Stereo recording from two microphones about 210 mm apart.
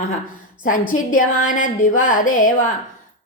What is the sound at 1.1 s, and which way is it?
A woman's voice, 40° left (ahead or behind).